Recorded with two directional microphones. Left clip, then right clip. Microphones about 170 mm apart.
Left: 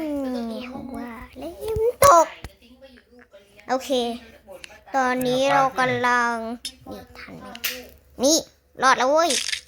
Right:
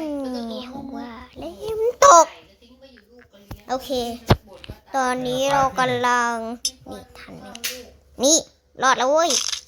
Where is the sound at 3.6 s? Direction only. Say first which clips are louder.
Left 2 dB; 10° left (ahead or behind).